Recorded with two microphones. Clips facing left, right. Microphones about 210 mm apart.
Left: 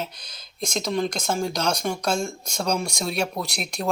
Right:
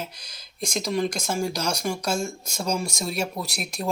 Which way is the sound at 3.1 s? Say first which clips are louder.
Left 2 dB; 5° right (ahead or behind).